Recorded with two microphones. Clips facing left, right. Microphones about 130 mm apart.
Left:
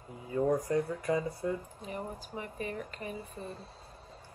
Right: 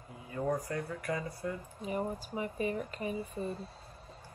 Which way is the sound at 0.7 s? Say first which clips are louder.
Left 6 dB; 20° left (ahead or behind).